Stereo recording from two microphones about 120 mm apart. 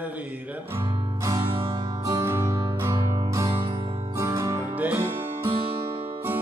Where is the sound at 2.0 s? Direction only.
25° right (ahead or behind).